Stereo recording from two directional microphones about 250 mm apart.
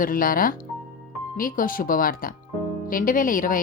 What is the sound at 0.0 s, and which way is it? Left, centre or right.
Speech, left.